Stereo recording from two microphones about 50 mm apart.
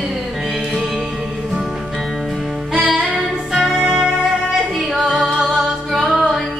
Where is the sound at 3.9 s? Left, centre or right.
Centre.